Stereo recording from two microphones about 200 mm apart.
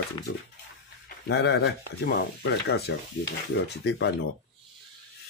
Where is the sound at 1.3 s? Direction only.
55° left (ahead or behind).